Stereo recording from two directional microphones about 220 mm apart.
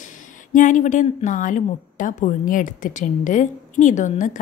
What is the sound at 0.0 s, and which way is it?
A woman's voice, 35° left (ahead or behind).